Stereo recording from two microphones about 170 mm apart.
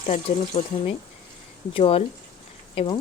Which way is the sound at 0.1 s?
40° left (ahead or behind).